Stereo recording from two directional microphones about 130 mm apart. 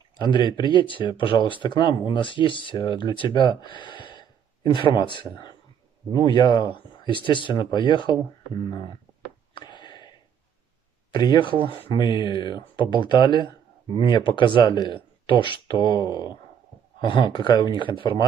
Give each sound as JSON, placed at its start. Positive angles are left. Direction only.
{"t": 0.2, "sound": "speech", "side_deg": 35}
{"t": 9.5, "sound": "a sound", "side_deg": 35}
{"t": 11.1, "sound": "speech", "side_deg": 35}